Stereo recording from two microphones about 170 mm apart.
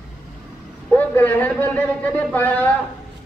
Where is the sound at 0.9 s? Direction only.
10° left (ahead or behind).